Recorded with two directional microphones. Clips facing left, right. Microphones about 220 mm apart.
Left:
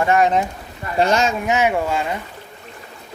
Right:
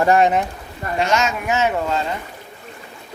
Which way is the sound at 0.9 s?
35° left (ahead or behind).